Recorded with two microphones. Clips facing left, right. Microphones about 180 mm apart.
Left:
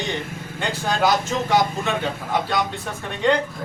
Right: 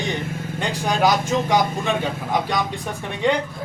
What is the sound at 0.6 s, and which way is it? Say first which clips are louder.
Speech: right 1 dB; 15° right (ahead or behind).